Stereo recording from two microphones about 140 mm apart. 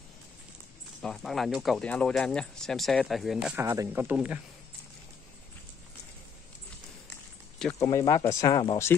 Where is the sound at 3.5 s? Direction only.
20° right (ahead or behind).